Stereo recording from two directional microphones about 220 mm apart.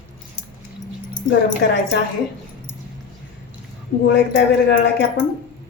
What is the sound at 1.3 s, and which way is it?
Speech, 50° left (ahead or behind).